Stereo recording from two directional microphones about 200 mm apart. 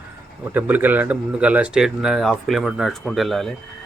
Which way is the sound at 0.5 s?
10° right (ahead or behind).